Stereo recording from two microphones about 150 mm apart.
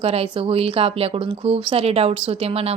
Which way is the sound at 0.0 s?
40° right (ahead or behind).